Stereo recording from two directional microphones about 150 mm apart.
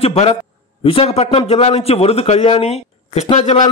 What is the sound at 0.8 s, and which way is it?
A man's voice, 40° left (ahead or behind).